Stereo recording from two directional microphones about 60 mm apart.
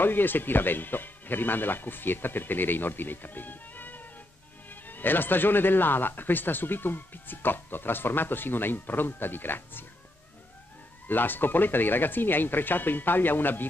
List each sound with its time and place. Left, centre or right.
0.0 s speech: left
11.1 s speech: left